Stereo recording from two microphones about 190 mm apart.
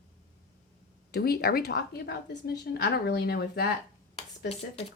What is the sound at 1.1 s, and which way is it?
Speech, 55° left (ahead or behind).